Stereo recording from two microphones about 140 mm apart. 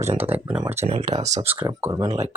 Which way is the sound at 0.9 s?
45° right (ahead or behind).